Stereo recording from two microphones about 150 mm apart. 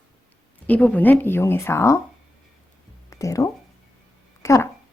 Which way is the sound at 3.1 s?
20° left (ahead or behind).